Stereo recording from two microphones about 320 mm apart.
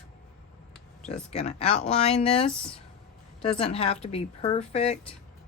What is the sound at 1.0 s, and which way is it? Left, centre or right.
Speech, centre.